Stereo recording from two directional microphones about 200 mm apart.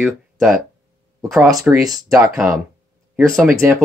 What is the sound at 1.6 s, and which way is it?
Speech, 15° right (ahead or behind).